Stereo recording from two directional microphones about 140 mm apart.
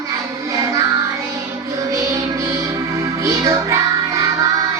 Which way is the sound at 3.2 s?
20° right (ahead or behind).